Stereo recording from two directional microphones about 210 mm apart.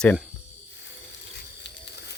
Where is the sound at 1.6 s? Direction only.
55° left (ahead or behind).